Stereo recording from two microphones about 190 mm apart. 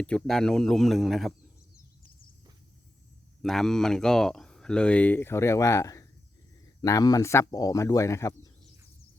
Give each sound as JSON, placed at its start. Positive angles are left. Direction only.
{"t": 0.0, "sound": "speech", "side_deg": 5}
{"t": 3.4, "sound": "speech", "side_deg": 0}